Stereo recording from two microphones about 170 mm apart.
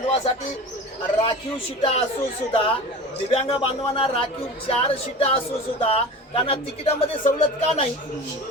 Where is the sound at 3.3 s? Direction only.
30° left (ahead or behind).